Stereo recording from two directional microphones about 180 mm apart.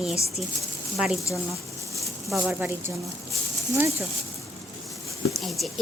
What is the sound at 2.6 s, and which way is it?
Speech, 15° right (ahead or behind).